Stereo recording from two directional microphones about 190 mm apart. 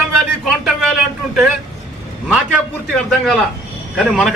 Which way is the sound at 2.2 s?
5° right (ahead or behind).